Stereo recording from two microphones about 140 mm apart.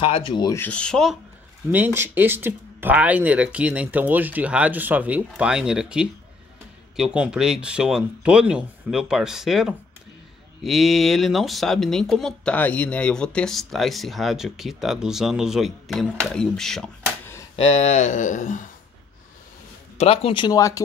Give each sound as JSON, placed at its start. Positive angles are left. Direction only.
{"t": 0.0, "sound": "speech", "side_deg": 40}
{"t": 0.5, "sound": "rub", "side_deg": 10}
{"t": 1.7, "sound": "speech", "side_deg": -15}
{"t": 17.8, "sound": "speech", "side_deg": 55}
{"t": 20.0, "sound": "speech", "side_deg": 45}
{"t": 20.4, "sound": "speech", "side_deg": 25}